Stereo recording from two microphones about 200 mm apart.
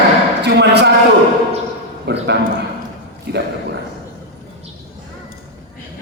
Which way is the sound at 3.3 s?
55° right (ahead or behind).